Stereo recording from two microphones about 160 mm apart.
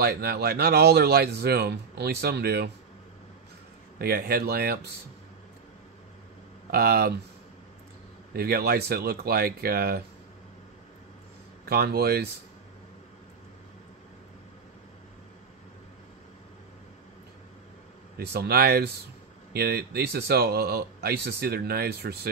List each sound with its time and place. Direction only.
0.0 s speech: 80° right
4.0 s speech: 75° right (ahead or behind)
6.7 s speech: 75° right (ahead or behind)
8.3 s speech: 75° right (ahead or behind)
11.6 s speech: 75° right (ahead or behind)
18.1 s speech: 85° right